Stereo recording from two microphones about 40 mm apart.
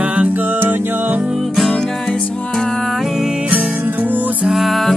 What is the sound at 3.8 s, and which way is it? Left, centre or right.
Music, right.